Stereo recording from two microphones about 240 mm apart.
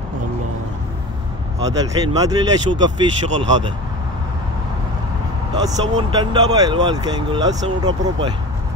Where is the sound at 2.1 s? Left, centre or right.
Centre.